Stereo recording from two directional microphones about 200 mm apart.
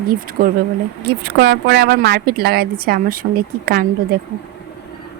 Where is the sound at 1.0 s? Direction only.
55° right (ahead or behind).